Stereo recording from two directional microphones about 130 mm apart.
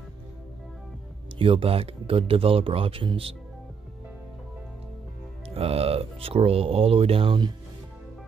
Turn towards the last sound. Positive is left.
turn(degrees=-40)  # may be behind; listen again after turning